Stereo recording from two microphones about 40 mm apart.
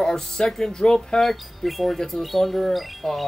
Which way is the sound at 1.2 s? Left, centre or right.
Centre.